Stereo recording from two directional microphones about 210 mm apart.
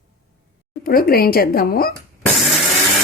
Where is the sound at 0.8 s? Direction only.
45° left (ahead or behind).